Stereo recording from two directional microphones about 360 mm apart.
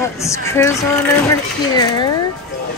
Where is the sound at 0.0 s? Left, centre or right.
Centre.